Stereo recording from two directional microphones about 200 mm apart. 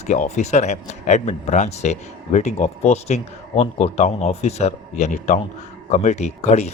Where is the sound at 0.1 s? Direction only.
35° left (ahead or behind).